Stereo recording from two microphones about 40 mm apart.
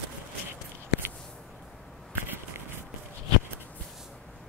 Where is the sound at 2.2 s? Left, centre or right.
Right.